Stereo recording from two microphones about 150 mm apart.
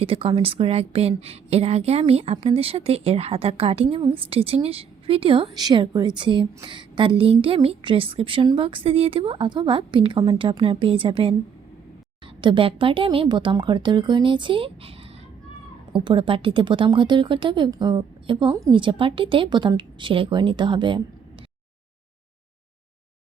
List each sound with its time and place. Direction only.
0.0 s a woman's voice: 40° right (ahead or behind)
12.4 s a woman's voice: 35° right (ahead or behind)
18.5 s a woman's voice: 20° right (ahead or behind)
18.8 s a woman's voice: 35° right (ahead or behind)